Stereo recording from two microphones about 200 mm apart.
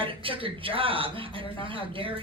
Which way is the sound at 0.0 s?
25° right (ahead or behind).